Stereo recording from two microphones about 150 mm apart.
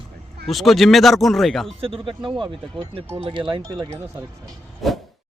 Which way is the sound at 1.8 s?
35° right (ahead or behind).